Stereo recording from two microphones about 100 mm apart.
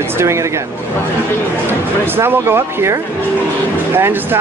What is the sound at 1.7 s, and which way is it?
Speech, 20° right (ahead or behind).